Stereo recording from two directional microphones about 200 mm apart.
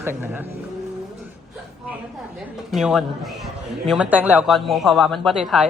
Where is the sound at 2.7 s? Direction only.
Centre (ahead or behind).